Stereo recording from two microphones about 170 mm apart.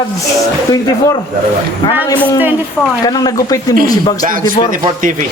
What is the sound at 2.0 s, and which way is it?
A man's voice, 20° left (ahead or behind).